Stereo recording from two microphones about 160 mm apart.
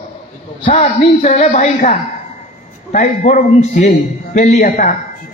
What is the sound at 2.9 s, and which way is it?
A man's voice, 50° left (ahead or behind).